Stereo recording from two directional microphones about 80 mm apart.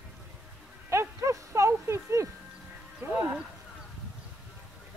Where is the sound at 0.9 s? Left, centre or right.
Right.